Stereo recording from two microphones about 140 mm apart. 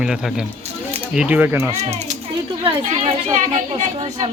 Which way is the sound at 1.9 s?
55° right (ahead or behind).